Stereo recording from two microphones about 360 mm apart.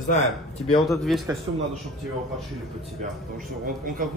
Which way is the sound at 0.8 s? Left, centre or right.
Centre.